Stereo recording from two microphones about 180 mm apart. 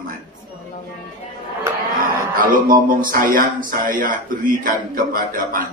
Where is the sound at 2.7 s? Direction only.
50° right (ahead or behind).